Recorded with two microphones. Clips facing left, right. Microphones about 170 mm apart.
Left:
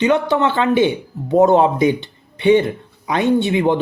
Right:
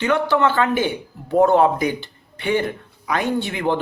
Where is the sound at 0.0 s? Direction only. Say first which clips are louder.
Left 3 dB; 20° left (ahead or behind).